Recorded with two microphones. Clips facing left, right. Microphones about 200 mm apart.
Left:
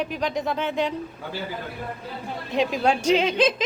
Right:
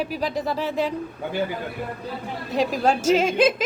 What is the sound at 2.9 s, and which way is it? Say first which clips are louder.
Speech: right 2 dB; 45° right (ahead or behind).